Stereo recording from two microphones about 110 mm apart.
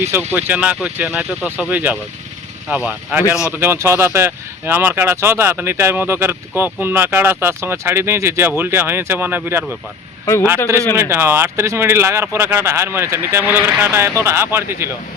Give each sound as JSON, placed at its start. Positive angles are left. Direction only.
{"t": 0.0, "sound": "speech", "side_deg": -20}
{"t": 10.9, "sound": "speech", "side_deg": -20}